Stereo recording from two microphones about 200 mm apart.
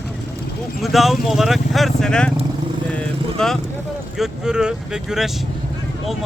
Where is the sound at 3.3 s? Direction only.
Centre (ahead or behind).